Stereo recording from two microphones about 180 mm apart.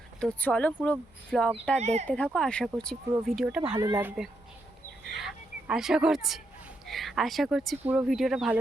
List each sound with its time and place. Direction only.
0.3 s speech: 10° left (ahead or behind)
1.8 s speech: 40° right (ahead or behind)
2.0 s speech: 5° left (ahead or behind)
3.8 s speech: 20° right (ahead or behind)
4.0 s speech: 5° right (ahead or behind)
5.0 s a sound: centre (ahead or behind)
6.8 s speech: centre (ahead or behind)